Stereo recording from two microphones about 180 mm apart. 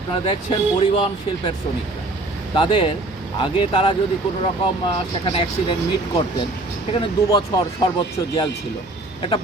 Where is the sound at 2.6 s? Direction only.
30° left (ahead or behind).